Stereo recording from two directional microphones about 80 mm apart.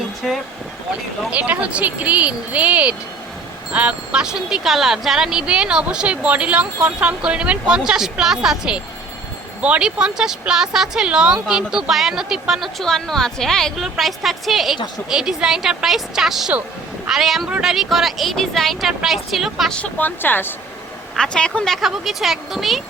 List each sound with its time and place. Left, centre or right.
0.2 s vehicle: centre
1.3 s speech: centre
19.7 s speech: centre
21.2 s speech: centre